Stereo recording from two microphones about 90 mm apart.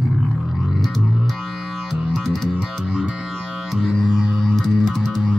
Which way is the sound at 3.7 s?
Centre (ahead or behind).